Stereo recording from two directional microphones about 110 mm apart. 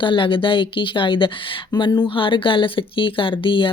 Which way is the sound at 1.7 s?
35° left (ahead or behind).